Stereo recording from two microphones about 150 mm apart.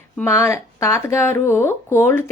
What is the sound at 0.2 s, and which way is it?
Speech, 20° left (ahead or behind).